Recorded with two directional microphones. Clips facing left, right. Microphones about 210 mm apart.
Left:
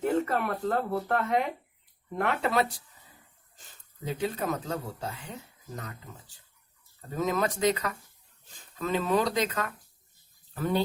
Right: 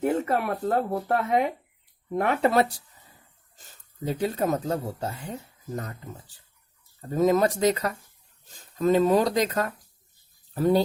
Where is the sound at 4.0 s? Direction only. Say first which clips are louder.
Right 5 dB; 40° right (ahead or behind).